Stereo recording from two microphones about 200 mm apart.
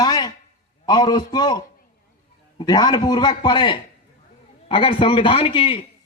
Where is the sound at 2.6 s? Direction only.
20° left (ahead or behind).